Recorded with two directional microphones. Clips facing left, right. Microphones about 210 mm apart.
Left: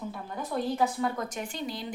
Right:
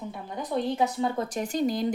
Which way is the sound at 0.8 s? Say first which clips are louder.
Right 2 dB; 25° right (ahead or behind).